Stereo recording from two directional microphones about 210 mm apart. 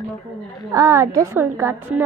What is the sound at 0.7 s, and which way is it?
A woman's voice, 15° right (ahead or behind).